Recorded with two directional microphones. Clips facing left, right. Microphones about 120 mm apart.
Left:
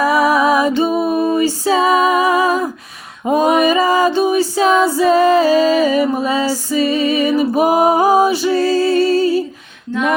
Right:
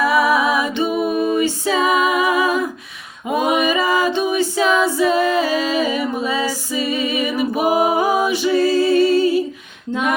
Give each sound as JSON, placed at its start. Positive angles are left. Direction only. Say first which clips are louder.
{"t": 0.0, "sound": "music", "louder": "left 3 dB", "side_deg": 40}
{"t": 3.2, "sound": "female singing", "louder": "left 5 dB", "side_deg": 40}
{"t": 3.6, "sound": "a capella", "louder": "left 4 dB", "side_deg": 40}
{"t": 6.5, "sound": "music", "louder": "left 6 dB", "side_deg": 40}
{"t": 9.9, "sound": "music", "louder": "left 3 dB", "side_deg": -20}